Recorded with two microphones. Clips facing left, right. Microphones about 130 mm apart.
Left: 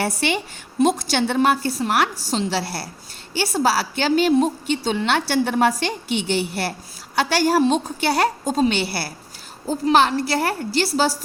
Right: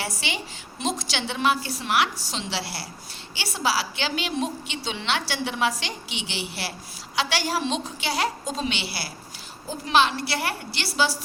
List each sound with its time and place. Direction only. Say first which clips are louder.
0.0 s a woman's voice: left 9 dB; 55° left (ahead or behind)